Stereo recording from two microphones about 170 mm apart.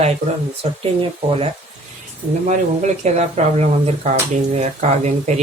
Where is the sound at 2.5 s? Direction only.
45° right (ahead or behind).